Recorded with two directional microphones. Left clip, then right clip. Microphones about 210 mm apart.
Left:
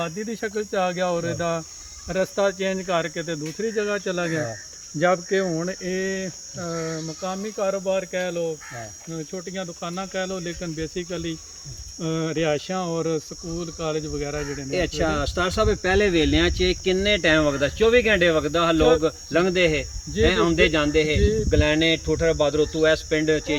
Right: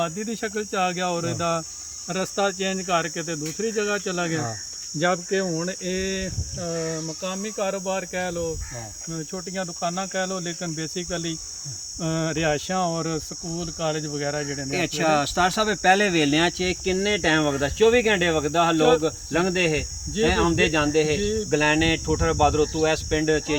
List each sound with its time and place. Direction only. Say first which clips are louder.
0.0 s cricket: right 1 dB; 5° left (ahead or behind)
5.3 s cricket: left 2 dB; 20° left (ahead or behind); by 8.4 s 5° right (ahead or behind)
9.1 s speech: even; 20° right (ahead or behind)
14.7 s speech: right 2 dB; 55° right (ahead or behind); by 23.6 s 25° right (ahead or behind)